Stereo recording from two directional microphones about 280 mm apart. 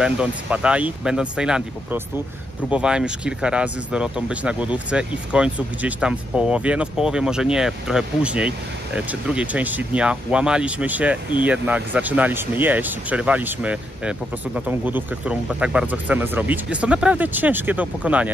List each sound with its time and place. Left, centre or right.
0.0 s speech: centre